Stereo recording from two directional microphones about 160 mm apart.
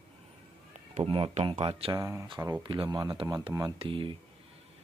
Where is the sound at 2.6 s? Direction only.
30° right (ahead or behind).